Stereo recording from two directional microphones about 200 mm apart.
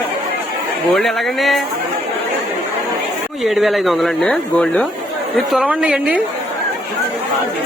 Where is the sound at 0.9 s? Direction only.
Centre (ahead or behind).